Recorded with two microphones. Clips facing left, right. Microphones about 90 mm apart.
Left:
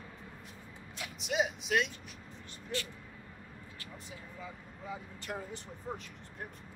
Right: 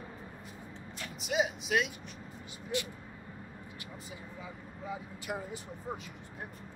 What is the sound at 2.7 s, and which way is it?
Speech, 15° right (ahead or behind).